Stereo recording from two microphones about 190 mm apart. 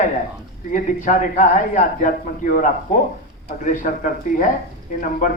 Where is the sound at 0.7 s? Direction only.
45° left (ahead or behind).